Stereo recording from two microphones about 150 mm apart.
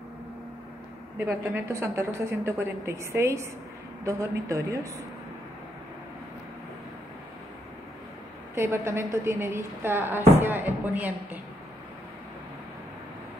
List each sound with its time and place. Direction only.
1.1 s a woman's voice: 15° right (ahead or behind)
8.5 s a woman's voice: 15° right (ahead or behind)